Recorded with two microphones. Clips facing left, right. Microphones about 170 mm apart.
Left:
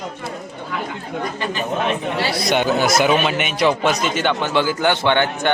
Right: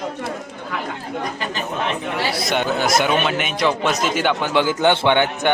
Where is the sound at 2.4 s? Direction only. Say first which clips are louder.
Left 4 dB; centre (ahead or behind).